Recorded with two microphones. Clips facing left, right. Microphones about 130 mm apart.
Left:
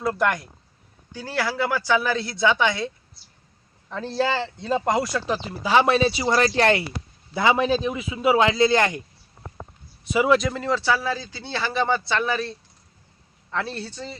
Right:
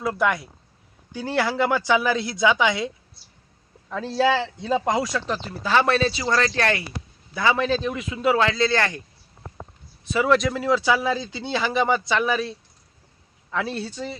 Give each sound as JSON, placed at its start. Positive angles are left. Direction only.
{"t": 0.0, "sound": "speech", "side_deg": -5}
{"t": 1.1, "sound": "a man's voice", "side_deg": -20}
{"t": 10.1, "sound": "speech", "side_deg": 10}